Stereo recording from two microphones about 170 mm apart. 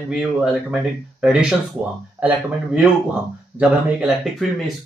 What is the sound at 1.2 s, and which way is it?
Speech, 5° right (ahead or behind).